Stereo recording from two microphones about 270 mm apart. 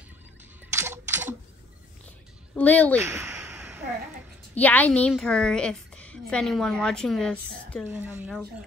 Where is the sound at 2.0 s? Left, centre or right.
Centre.